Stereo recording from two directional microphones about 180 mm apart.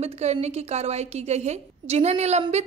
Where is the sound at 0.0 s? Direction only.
35° right (ahead or behind).